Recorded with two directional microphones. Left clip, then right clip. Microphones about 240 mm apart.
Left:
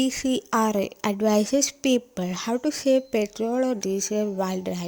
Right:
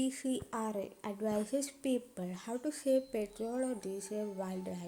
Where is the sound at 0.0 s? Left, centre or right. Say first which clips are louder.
Left 12 dB; left.